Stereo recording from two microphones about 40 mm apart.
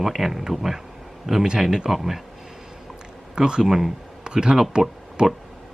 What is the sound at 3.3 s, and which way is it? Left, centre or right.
Speech, centre.